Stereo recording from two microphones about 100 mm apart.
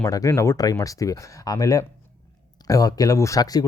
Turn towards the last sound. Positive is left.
turn(degrees=40)  # may be behind; listen again after turning